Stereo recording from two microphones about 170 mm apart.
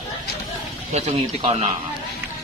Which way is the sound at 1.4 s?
35° right (ahead or behind).